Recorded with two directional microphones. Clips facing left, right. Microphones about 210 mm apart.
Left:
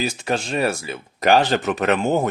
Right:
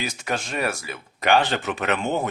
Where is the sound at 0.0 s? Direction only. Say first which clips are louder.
Left 5 dB; 30° left (ahead or behind).